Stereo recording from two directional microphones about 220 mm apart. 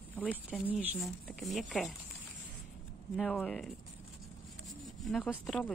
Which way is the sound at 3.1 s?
Centre (ahead or behind).